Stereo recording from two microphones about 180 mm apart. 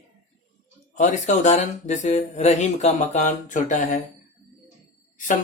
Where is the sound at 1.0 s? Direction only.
40° left (ahead or behind).